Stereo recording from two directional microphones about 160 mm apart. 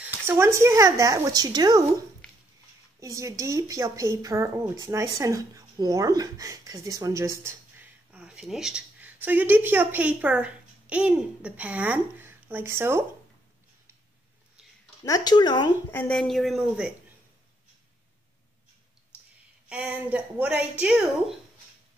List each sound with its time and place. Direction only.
0.3 s speech: 15° right (ahead or behind)
3.0 s a woman's voice: 20° right (ahead or behind)
15.0 s speech: 25° left (ahead or behind)
15.9 s a woman's voice: 10° left (ahead or behind)
16.2 s speech: centre (ahead or behind)
19.7 s speech: 10° right (ahead or behind)